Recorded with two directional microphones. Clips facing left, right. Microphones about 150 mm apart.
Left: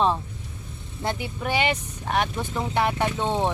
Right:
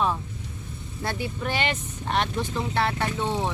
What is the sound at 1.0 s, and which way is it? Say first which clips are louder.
Speech: left 1 dB; 20° left (ahead or behind).